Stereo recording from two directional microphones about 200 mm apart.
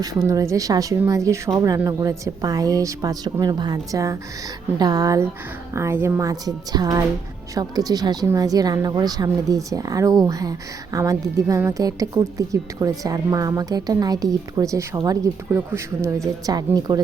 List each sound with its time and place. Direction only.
0.3 s a woman's voice: 15° right (ahead or behind)